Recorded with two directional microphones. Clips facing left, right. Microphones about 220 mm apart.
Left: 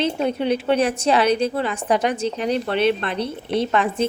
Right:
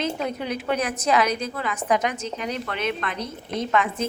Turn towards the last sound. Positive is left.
turn(degrees=30)  # may be behind; listen again after turning